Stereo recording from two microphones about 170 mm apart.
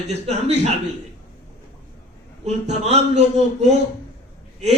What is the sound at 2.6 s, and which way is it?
A man's voice, 40° right (ahead or behind).